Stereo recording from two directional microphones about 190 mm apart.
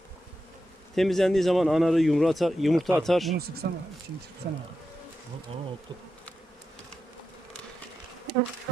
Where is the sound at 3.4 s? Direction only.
55° right (ahead or behind).